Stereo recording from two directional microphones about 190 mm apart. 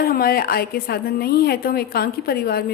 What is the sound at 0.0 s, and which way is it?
A woman's voice, 50° left (ahead or behind).